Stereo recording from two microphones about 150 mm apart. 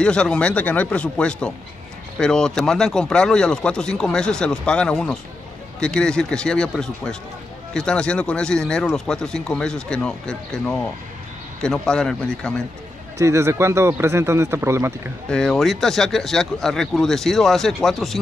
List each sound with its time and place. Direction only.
0.0 s a man's voice: 5° left (ahead or behind)
13.2 s speech: 20° right (ahead or behind)
15.2 s a man's voice: 5° left (ahead or behind)